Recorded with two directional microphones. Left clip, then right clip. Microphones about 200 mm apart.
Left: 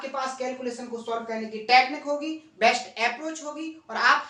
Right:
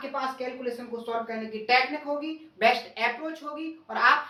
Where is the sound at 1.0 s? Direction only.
10° left (ahead or behind).